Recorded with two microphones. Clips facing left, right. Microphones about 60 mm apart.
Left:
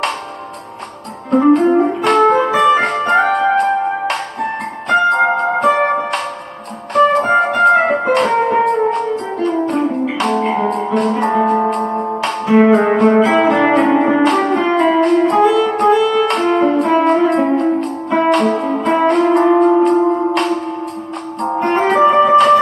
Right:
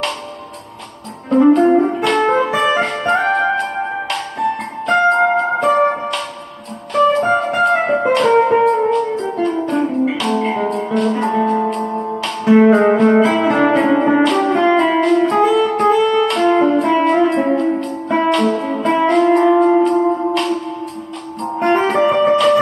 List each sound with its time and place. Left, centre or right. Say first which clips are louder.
1.3 s music: even; left
11.9 s music: left 2 dB; left
12.2 s music: right 1 dB; left
14.5 s music: right 1 dB; right
14.8 s music: left 1 dB; left